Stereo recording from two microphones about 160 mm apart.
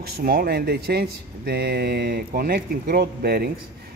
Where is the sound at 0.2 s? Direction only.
70° right (ahead or behind).